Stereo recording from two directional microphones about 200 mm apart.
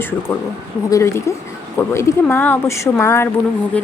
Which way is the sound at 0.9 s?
15° left (ahead or behind).